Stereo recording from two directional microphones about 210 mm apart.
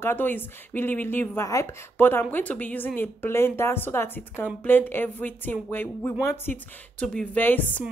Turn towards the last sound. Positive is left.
turn(degrees=10)  # may be behind; listen again after turning